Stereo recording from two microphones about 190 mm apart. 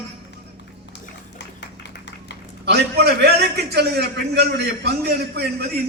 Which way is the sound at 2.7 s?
60° right (ahead or behind).